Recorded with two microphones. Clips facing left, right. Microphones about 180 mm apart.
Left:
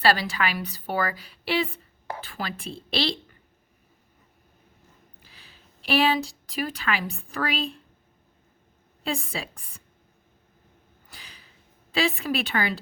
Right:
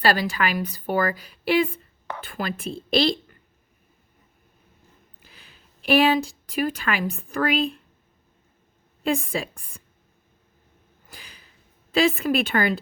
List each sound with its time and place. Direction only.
0.0 s a woman's voice: 45° right (ahead or behind)
5.8 s a woman's voice: 50° right (ahead or behind)
9.0 s a woman's voice: 50° right (ahead or behind)
11.1 s a sound: 45° right (ahead or behind)
11.9 s a woman's voice: 50° right (ahead or behind)